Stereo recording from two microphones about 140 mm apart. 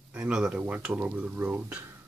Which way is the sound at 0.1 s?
5° right (ahead or behind).